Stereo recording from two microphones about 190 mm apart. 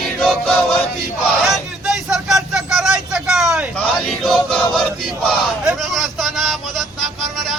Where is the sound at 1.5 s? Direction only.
Centre (ahead or behind).